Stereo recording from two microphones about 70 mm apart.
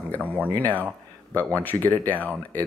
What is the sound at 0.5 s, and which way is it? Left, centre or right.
Speech, left.